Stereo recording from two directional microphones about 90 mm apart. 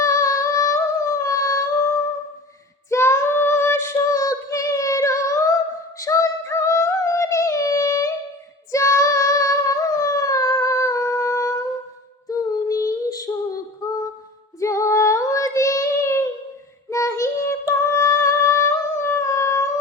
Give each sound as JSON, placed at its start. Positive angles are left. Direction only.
{"t": 0.0, "sound": "humming", "side_deg": 35}
{"t": 2.9, "sound": "child singing", "side_deg": 30}
{"t": 6.0, "sound": "music", "side_deg": 35}
{"t": 8.7, "sound": "female singing", "side_deg": 35}
{"t": 14.6, "sound": "child singing", "side_deg": 35}